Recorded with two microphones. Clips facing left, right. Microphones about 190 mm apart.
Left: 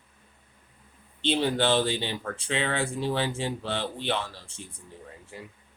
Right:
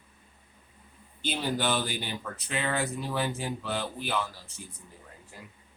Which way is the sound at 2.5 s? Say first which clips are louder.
Left 2 dB; 90° left.